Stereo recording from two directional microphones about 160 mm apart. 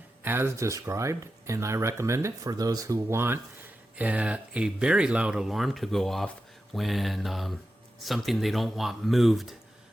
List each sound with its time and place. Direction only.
0.3 s speech: 15° right (ahead or behind)